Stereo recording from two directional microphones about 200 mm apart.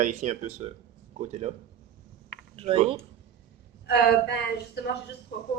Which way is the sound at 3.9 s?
55° left (ahead or behind).